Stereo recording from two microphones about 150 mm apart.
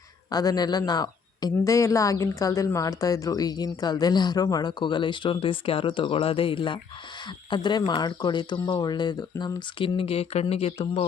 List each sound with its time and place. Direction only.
0.3 s speech: 25° left (ahead or behind); by 11.0 s 45° left (ahead or behind)